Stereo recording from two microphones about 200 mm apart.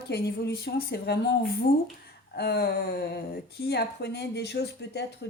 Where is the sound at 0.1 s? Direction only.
55° left (ahead or behind).